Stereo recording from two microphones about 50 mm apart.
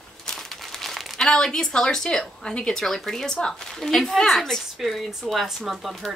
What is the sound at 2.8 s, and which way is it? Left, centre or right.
A woman's voice, centre.